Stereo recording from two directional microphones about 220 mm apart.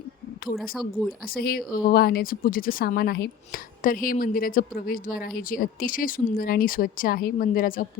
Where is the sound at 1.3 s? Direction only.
40° left (ahead or behind).